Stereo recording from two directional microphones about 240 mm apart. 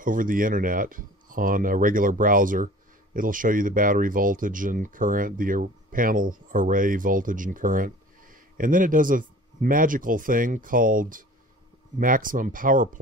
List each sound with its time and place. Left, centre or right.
0.0 s speech: right